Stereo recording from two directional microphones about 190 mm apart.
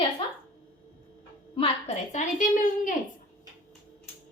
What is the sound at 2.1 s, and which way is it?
Speech, 45° left (ahead or behind).